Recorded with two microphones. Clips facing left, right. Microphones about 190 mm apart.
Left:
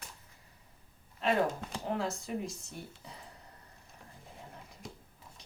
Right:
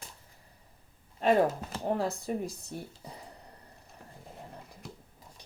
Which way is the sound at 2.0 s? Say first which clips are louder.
Right 3 dB; 35° right (ahead or behind).